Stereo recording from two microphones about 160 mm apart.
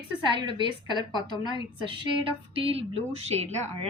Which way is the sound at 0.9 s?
30° left (ahead or behind).